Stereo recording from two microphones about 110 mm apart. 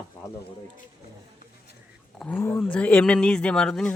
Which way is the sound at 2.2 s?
10° left (ahead or behind).